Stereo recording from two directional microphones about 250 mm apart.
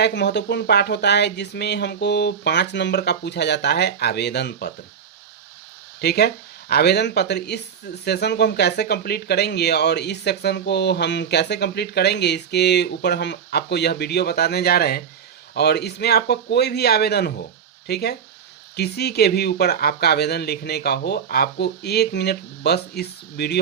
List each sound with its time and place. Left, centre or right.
0.0 s speech: left
6.0 s speech: left